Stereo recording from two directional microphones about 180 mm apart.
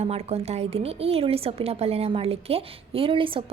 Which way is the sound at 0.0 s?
35° right (ahead or behind).